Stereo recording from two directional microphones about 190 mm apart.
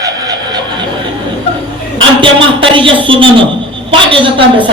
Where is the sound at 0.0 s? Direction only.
20° right (ahead or behind).